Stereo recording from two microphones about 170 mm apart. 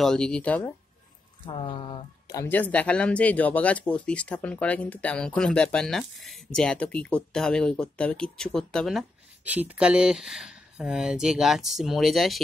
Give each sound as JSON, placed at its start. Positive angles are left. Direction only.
{"t": 0.0, "sound": "speech", "side_deg": 5}
{"t": 1.4, "sound": "speech", "side_deg": 30}
{"t": 2.4, "sound": "speech", "side_deg": 10}